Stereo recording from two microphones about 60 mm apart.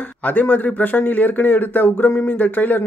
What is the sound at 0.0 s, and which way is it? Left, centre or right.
A man's voice, left.